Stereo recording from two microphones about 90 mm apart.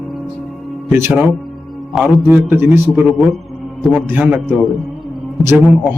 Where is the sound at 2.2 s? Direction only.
25° right (ahead or behind).